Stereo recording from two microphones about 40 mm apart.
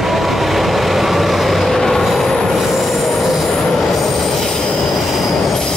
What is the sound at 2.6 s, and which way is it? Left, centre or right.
Train wheels squealing, centre.